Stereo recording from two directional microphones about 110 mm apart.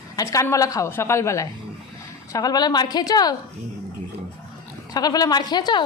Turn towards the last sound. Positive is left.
turn(degrees=40)  # may be behind; listen again after turning